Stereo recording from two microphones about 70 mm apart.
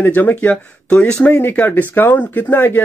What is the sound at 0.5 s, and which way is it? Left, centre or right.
Speech, centre.